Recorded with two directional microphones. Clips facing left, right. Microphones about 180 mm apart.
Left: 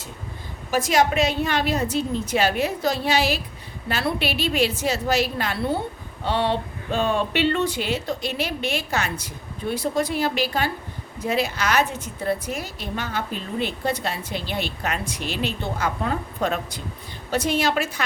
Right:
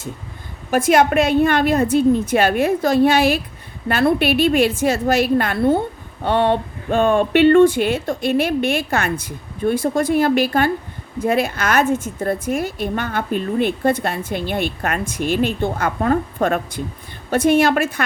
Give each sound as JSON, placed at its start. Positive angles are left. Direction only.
{"t": 0.7, "sound": "a woman's voice", "side_deg": -55}